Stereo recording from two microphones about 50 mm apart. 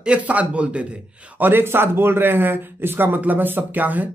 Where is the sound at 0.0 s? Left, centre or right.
Right.